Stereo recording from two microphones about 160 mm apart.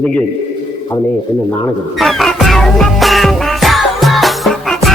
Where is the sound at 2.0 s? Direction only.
Centre (ahead or behind).